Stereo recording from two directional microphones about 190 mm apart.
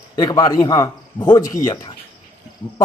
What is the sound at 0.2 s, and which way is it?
Speech, 20° left (ahead or behind).